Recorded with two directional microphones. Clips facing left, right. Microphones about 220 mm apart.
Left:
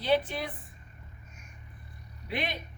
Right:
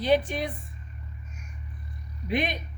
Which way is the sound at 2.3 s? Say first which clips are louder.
Right 6 dB; 20° right (ahead or behind).